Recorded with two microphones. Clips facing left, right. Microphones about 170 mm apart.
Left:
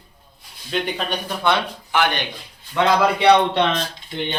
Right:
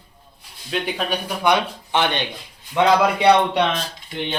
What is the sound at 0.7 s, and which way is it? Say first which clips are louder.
A man's voice: even; 5° right (ahead or behind).